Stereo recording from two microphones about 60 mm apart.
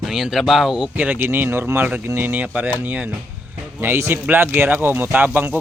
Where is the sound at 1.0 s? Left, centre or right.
Right.